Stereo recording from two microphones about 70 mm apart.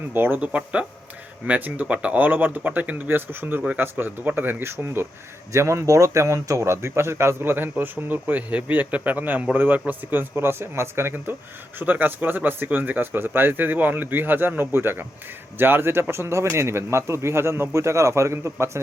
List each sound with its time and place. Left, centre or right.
0.1 s speech: right
0.4 s speech: centre; by 18.8 s right